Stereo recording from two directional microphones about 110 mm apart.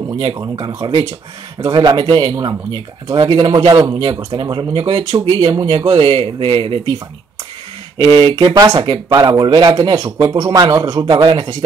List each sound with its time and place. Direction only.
0.0 s speech: 45° right (ahead or behind)
8.0 s speech: 50° right (ahead or behind)
11.2 s speech: 50° right (ahead or behind)